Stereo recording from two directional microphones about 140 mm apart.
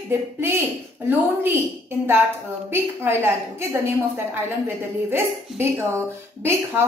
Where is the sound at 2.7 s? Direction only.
15° right (ahead or behind).